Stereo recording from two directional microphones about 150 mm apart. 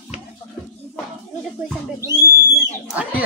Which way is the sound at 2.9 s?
10° right (ahead or behind).